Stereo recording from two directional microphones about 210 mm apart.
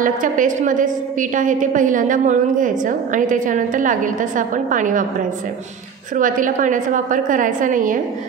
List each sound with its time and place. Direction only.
0.0 s a woman's voice: 40° right (ahead or behind)
6.1 s a woman's voice: 40° right (ahead or behind)